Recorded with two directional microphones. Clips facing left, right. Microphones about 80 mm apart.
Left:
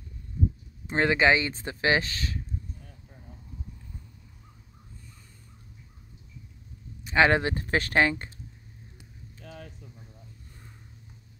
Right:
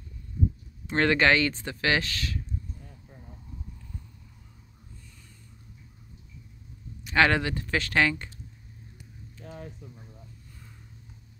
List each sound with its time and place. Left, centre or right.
0.9 s speech: centre; by 2.4 s left
7.1 s speech: left